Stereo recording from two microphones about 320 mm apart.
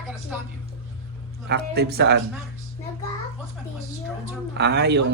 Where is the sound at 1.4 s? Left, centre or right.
Right.